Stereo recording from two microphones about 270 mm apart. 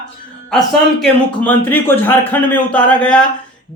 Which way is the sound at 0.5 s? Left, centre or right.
Centre.